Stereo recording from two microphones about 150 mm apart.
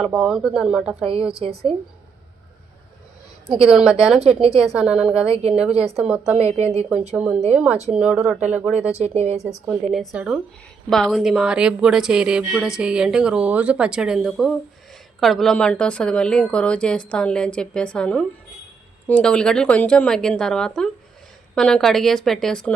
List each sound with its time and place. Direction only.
0.0 s speech: 5° right (ahead or behind)
1.3 s a woman's voice: 40° right (ahead or behind)
3.5 s speech: 5° right (ahead or behind)
4.4 s a woman's voice: 40° right (ahead or behind)
4.6 s speech: centre (ahead or behind)
5.7 s a woman's voice: 40° right (ahead or behind)
6.0 s speech: 10° right (ahead or behind)
6.6 s a woman's voice: 45° right (ahead or behind)
7.1 s speech: 5° right (ahead or behind)
9.0 s a woman's voice: 45° right (ahead or behind)
9.6 s a woman's voice: centre (ahead or behind)